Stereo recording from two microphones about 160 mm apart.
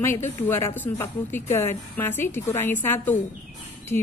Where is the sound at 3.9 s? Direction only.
70° left (ahead or behind).